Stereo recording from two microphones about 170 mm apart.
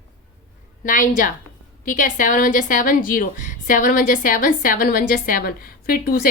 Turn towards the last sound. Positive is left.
turn(degrees=60)  # may be behind; listen again after turning